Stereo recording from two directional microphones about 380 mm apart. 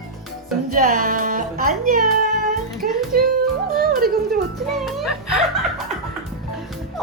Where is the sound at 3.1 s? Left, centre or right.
Right.